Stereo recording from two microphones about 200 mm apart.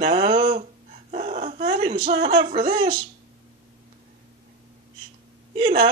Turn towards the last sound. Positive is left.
turn(degrees=-30)  # may be behind; listen again after turning